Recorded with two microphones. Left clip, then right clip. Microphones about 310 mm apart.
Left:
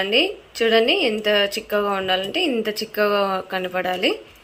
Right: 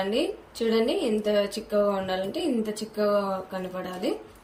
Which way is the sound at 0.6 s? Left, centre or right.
Centre.